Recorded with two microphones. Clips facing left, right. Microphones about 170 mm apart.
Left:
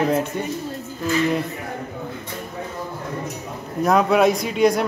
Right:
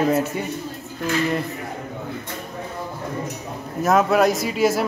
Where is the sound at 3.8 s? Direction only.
Centre (ahead or behind).